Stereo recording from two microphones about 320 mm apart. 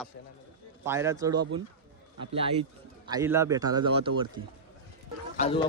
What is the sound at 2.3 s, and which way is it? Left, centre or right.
A man's voice, centre.